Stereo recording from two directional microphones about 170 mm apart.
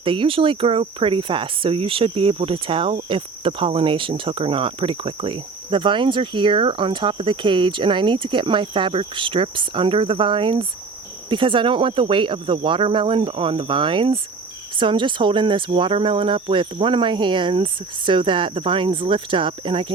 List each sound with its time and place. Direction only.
0.0 s speech: 30° right (ahead or behind)